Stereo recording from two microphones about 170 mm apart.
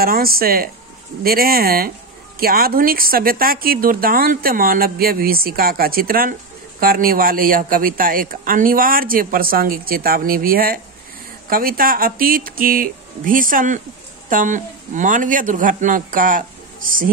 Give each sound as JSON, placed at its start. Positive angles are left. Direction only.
{"t": 0.0, "sound": "a woman's voice", "side_deg": -60}